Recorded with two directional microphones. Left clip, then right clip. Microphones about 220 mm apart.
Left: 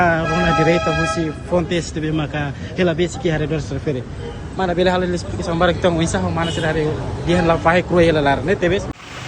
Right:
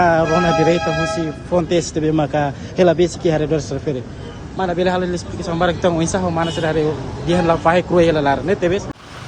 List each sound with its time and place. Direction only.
0.0 s a man's voice: 15° right (ahead or behind)
1.7 s a man's voice: 25° right (ahead or behind)
4.5 s a man's voice: 10° right (ahead or behind)